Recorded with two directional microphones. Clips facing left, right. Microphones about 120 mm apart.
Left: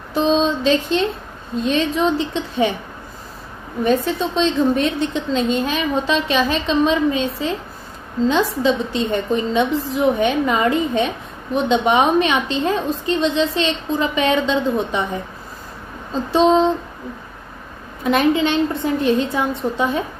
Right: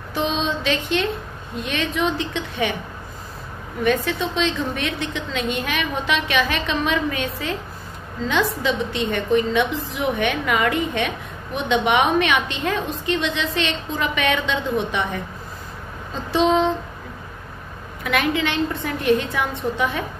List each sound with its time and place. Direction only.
0.1 s a woman's voice: 30° left (ahead or behind)
3.8 s a woman's voice: 35° left (ahead or behind)
8.3 s a woman's voice: 30° left (ahead or behind)
16.1 s a woman's voice: 35° left (ahead or behind)
18.0 s a woman's voice: 30° left (ahead or behind)